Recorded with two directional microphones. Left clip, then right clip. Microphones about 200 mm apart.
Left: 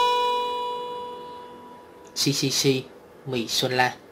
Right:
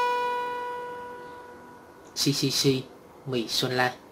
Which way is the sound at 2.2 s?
15° left (ahead or behind).